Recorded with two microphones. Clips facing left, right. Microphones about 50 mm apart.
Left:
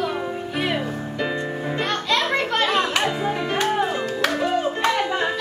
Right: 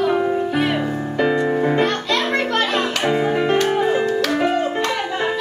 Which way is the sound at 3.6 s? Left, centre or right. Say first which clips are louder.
Right 3 dB; centre.